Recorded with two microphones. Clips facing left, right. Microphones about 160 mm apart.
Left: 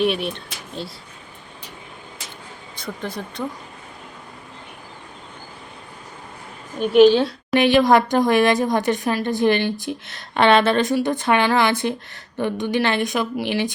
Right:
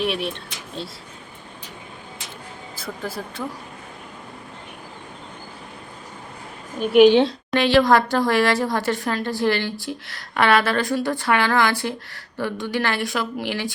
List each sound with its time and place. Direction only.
0.0 s speech: centre (ahead or behind)
2.7 s speech: 5° right (ahead or behind)
6.7 s a woman's voice: 10° right (ahead or behind)
7.5 s speech: 20° left (ahead or behind)